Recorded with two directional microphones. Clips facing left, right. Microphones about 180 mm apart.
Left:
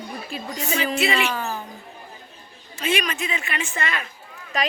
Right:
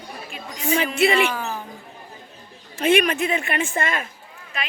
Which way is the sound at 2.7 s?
55° right (ahead or behind).